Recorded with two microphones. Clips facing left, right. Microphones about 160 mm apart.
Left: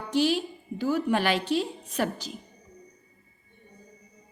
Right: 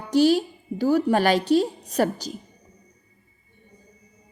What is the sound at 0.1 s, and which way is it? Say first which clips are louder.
A woman's voice: right 7 dB; 40° right (ahead or behind).